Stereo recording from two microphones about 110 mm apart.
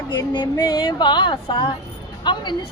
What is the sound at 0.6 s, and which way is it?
Speech, 40° left (ahead or behind).